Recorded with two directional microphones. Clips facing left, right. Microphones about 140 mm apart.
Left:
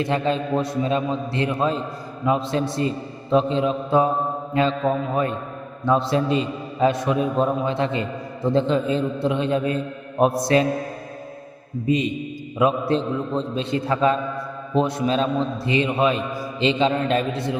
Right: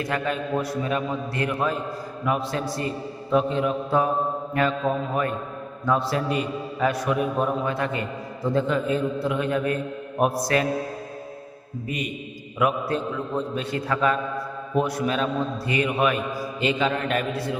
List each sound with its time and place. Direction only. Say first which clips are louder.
0.0 s a man's voice: left 4 dB; 25° left (ahead or behind)
11.9 s a man's voice: left 10 dB; 25° left (ahead or behind)